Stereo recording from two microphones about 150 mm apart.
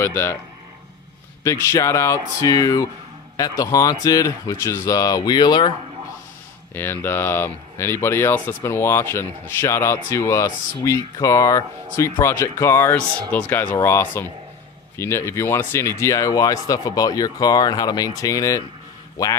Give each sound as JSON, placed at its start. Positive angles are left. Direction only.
{"t": 0.0, "sound": "speech", "side_deg": 15}
{"t": 1.5, "sound": "speech", "side_deg": 20}
{"t": 6.7, "sound": "speech", "side_deg": 15}